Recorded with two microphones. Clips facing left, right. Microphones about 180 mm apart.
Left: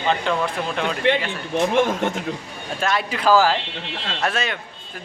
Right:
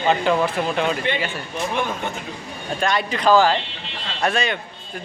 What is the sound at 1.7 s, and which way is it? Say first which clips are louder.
Speech: left 5 dB; 90° left.